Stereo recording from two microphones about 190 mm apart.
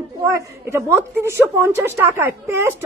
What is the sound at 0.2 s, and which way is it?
A woman's voice, 15° right (ahead or behind).